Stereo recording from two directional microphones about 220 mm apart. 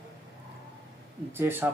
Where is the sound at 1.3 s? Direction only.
10° right (ahead or behind).